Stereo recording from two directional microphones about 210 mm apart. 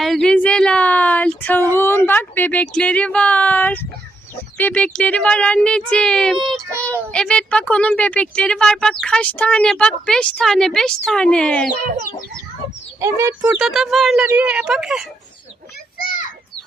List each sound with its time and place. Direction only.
0.0 s a sound: centre (ahead or behind)
4.5 s speech: 5° left (ahead or behind)
13.0 s speech: 15° right (ahead or behind)
16.0 s children playing: 40° left (ahead or behind)